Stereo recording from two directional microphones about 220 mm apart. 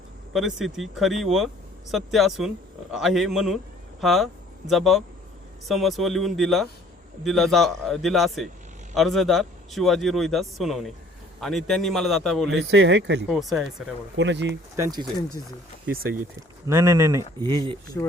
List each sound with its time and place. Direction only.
0.3 s a man's voice: centre (ahead or behind)
12.5 s speech: 55° right (ahead or behind)
13.3 s a man's voice: centre (ahead or behind)
14.2 s speech: 55° right (ahead or behind)
14.8 s speech: 20° right (ahead or behind)
15.9 s speech: 40° right (ahead or behind)
16.6 s speech: 15° right (ahead or behind)
18.0 s speech: 15° left (ahead or behind)